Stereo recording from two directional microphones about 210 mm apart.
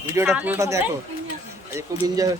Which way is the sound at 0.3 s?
5° right (ahead or behind).